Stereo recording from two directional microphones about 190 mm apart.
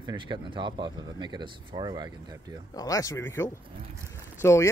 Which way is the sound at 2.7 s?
20° left (ahead or behind).